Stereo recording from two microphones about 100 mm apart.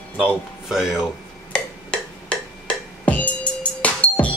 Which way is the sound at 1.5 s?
10° left (ahead or behind).